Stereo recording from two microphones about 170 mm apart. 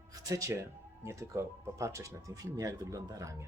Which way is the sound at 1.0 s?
15° right (ahead or behind).